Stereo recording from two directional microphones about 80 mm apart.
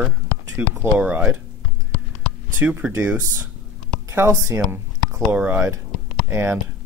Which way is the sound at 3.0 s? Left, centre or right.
Centre.